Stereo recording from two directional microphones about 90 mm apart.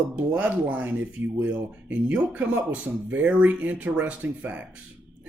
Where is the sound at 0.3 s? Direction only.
15° right (ahead or behind).